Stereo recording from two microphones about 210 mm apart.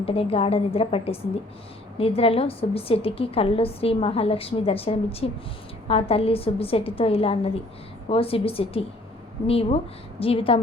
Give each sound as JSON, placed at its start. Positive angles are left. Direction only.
{"t": 0.0, "sound": "a woman's voice", "side_deg": 25}